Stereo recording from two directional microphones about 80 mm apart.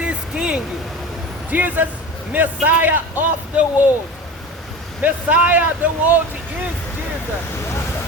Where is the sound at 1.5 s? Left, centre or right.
Right.